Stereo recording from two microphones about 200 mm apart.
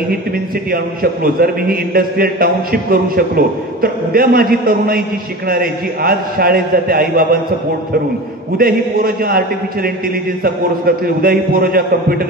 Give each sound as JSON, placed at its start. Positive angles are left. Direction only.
{"t": 0.7, "sound": "a man's voice", "side_deg": -50}
{"t": 8.5, "sound": "a man's voice", "side_deg": -45}
{"t": 10.4, "sound": "a man's voice", "side_deg": -50}